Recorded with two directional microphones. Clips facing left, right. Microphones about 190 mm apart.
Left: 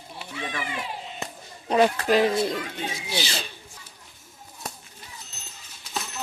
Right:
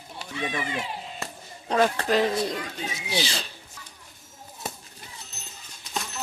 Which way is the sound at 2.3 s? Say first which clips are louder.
Left 2 dB; 25° left (ahead or behind).